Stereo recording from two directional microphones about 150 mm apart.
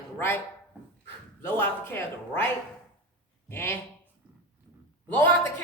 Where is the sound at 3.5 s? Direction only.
15° left (ahead or behind).